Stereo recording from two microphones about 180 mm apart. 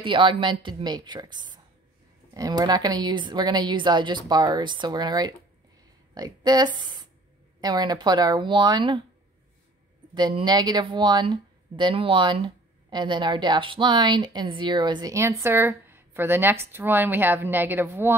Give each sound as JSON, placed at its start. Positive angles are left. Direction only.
{"t": 0.0, "sound": "speech", "side_deg": -25}
{"t": 10.1, "sound": "speech", "side_deg": -25}